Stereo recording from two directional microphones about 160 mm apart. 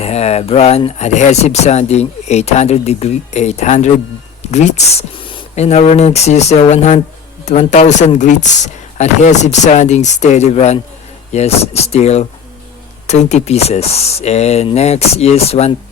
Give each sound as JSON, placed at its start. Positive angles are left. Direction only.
{"t": 0.0, "sound": "speech", "side_deg": 40}